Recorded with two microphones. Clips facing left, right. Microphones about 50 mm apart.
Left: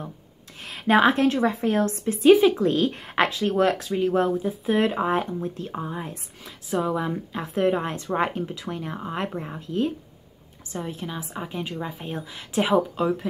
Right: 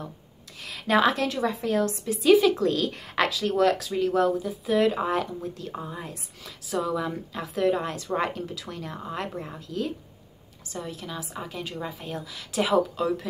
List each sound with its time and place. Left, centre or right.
0.6 s a woman's voice: left